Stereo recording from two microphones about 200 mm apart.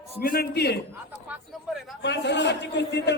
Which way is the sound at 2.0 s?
60° left (ahead or behind).